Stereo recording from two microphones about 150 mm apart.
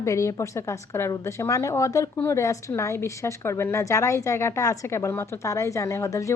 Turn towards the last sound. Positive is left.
turn(degrees=20)  # may be behind; listen again after turning